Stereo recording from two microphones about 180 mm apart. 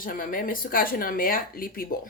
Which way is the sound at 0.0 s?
50° left (ahead or behind).